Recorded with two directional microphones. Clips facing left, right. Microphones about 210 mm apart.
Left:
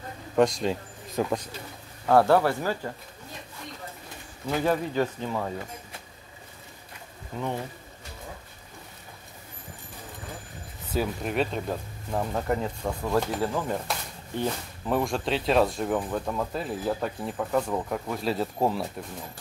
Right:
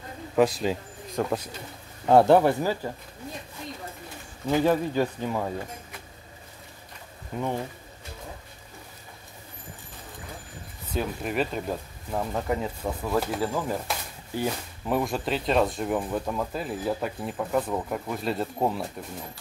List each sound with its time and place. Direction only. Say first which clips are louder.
0.4 s speech: even; 5° right (ahead or behind)
2.0 s speech: right 3 dB; 20° right (ahead or behind)
4.5 s speech: right 3 dB; 10° right (ahead or behind)
7.3 s speech: right 2 dB; 15° right (ahead or behind)
11.0 s speech: left 1 dB; centre (ahead or behind)